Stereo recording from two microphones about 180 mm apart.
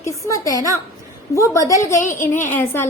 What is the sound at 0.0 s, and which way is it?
A woman's voice, 20° left (ahead or behind).